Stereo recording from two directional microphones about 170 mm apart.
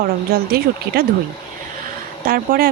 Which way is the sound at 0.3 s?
60° right (ahead or behind).